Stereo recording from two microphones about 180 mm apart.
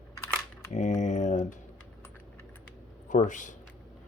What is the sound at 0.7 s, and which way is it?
Mantra, 40° left (ahead or behind).